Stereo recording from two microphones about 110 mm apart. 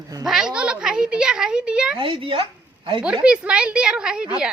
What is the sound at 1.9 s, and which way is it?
Speech, 50° right (ahead or behind).